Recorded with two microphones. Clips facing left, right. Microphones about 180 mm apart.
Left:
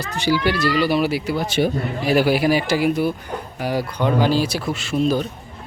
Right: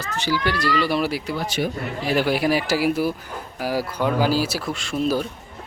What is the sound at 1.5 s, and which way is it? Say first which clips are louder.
Speech: left 6 dB; 25° left (ahead or behind).